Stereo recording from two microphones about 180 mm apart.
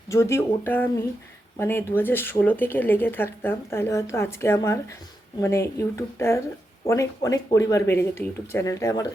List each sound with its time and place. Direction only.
0.1 s speech: 15° left (ahead or behind)